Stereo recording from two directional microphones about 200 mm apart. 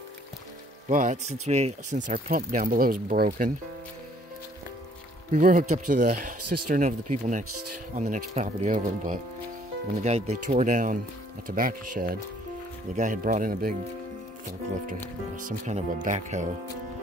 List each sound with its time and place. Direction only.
0.8 s speech: 40° right (ahead or behind)
2.0 s speech: 45° right (ahead or behind)
5.3 s speech: 45° right (ahead or behind)
10.3 s speech: 35° right (ahead or behind)
15.3 s speech: 40° right (ahead or behind)